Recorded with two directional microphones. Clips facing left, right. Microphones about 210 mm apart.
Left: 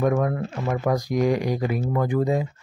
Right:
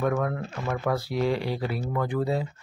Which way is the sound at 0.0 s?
15° left (ahead or behind).